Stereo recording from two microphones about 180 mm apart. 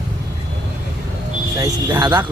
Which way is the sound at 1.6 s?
20° right (ahead or behind).